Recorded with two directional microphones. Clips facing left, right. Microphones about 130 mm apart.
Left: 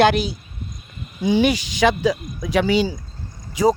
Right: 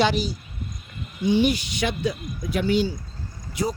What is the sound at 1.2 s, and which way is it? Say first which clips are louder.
Speech: left 3 dB; 90° left.